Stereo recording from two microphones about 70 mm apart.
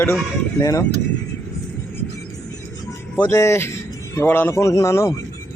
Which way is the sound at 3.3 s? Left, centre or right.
Left.